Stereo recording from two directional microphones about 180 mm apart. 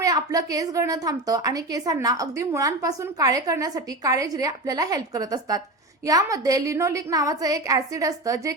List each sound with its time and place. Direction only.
0.0 s a woman's voice: 20° right (ahead or behind)